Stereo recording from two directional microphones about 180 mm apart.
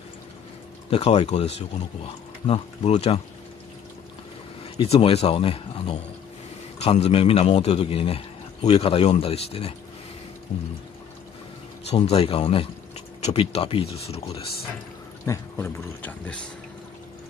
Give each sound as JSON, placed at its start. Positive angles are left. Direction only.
{"t": 0.8, "sound": "a man's voice", "side_deg": 35}
{"t": 4.8, "sound": "a man's voice", "side_deg": 35}
{"t": 11.9, "sound": "a man's voice", "side_deg": 35}
{"t": 15.2, "sound": "speech", "side_deg": 15}